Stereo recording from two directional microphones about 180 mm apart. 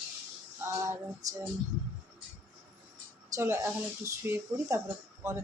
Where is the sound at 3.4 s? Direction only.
15° right (ahead or behind).